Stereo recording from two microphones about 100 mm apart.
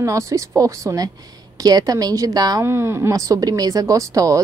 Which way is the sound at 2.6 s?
25° right (ahead or behind).